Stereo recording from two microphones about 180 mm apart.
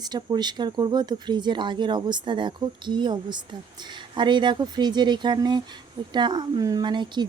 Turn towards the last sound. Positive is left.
turn(degrees=-25)  # may be behind; listen again after turning